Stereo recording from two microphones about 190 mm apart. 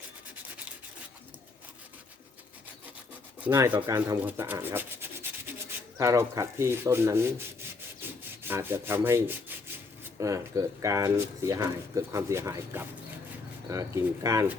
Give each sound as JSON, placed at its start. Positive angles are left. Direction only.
{"t": 3.4, "sound": "speech", "side_deg": -15}
{"t": 8.2, "sound": "rub", "side_deg": -10}
{"t": 10.0, "sound": "speech", "side_deg": -15}